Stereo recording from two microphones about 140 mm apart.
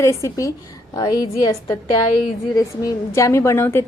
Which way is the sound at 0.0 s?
20° left (ahead or behind).